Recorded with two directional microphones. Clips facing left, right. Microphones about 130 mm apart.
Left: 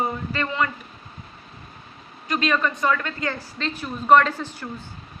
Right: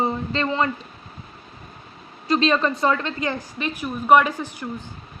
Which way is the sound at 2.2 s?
30° right (ahead or behind).